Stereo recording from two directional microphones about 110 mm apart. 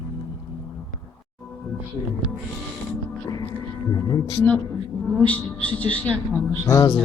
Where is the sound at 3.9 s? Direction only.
45° left (ahead or behind).